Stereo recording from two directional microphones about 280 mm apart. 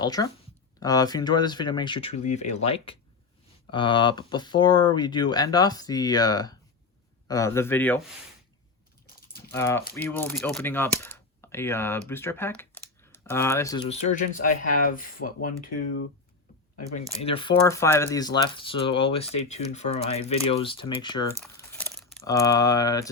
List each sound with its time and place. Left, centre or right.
0.0 s speech: centre
9.3 s a sound: centre
9.9 s speech: centre
14.7 s speech: left
17.2 s speech: centre
21.4 s a sound: centre
22.3 s speech: centre